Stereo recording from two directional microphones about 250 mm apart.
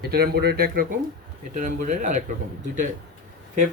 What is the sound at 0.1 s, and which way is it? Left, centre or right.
Speech, right.